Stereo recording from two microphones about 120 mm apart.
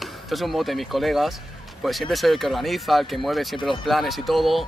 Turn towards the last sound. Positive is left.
turn(degrees=0)  # may be behind; listen again after turning